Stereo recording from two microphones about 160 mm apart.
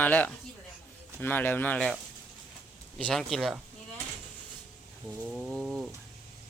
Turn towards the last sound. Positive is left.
turn(degrees=0)  # may be behind; listen again after turning